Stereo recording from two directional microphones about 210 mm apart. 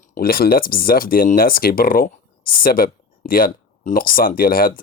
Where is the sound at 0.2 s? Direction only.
45° left (ahead or behind).